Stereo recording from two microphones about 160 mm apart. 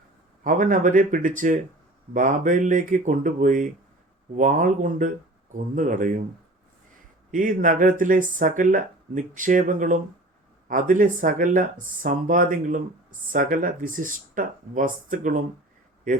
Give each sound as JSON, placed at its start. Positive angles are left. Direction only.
{"t": 0.4, "sound": "speech", "side_deg": -55}
{"t": 7.3, "sound": "speech", "side_deg": -55}